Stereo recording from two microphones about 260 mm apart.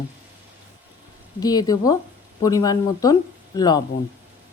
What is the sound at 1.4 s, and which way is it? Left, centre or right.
Speech, centre.